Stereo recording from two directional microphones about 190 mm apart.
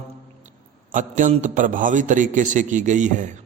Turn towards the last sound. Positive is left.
turn(degrees=-40)  # may be behind; listen again after turning